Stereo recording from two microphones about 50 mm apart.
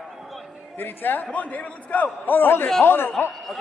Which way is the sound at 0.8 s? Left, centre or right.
Left.